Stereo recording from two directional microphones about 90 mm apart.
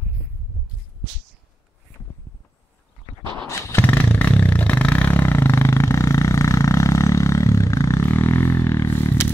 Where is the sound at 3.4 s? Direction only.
30° left (ahead or behind).